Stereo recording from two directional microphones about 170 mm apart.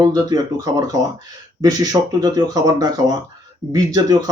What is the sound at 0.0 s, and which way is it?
Speech, 20° right (ahead or behind).